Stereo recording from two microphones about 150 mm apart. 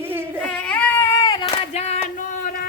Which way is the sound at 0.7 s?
10° left (ahead or behind).